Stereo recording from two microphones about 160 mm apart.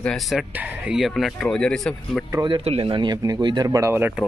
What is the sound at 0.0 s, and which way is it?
A man's voice, centre (ahead or behind).